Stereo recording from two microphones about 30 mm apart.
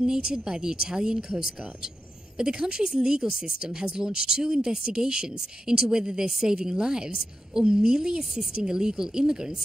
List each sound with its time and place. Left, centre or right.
0.0 s speech: right
2.3 s speech: right